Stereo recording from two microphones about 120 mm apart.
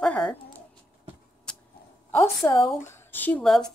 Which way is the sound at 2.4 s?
25° left (ahead or behind).